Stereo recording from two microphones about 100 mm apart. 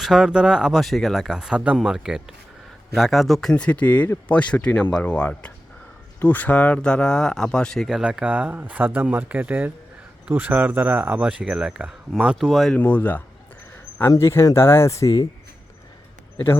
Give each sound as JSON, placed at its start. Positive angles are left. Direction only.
{"t": 0.0, "sound": "speech", "side_deg": -5}
{"t": 3.5, "sound": "speech", "side_deg": 15}
{"t": 12.7, "sound": "speech", "side_deg": 15}